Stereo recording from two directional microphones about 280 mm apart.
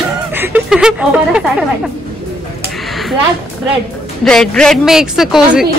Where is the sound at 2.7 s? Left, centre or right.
Centre.